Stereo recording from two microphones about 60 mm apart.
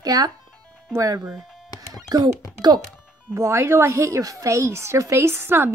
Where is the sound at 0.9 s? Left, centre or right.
Right.